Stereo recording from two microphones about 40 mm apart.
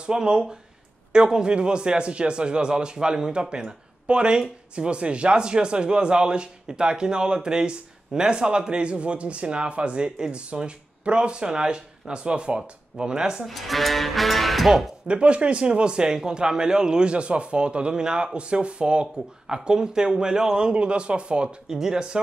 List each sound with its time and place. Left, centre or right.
0.0 s speech: right
13.5 s speech: centre
15.0 s speech: right
21.6 s speech: centre